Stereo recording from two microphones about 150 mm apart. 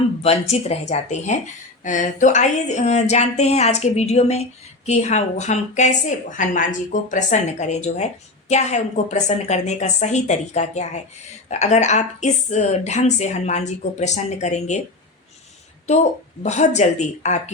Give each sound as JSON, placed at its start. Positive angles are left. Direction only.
{"t": 0.2, "sound": "a woman's voice", "side_deg": 45}
{"t": 16.4, "sound": "a woman's voice", "side_deg": 50}